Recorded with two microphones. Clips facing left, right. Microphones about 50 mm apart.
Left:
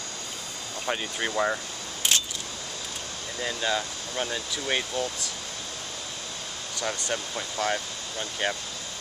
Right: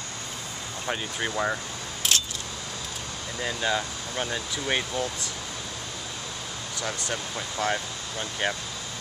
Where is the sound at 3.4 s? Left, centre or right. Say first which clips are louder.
Right 1 dB; centre.